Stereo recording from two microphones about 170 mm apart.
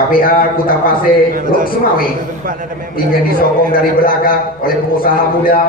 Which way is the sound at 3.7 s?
55° left (ahead or behind).